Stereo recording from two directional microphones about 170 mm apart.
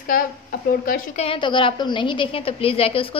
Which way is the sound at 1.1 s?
35° left (ahead or behind).